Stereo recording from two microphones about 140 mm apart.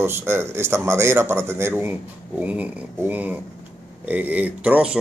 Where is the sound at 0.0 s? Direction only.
15° right (ahead or behind).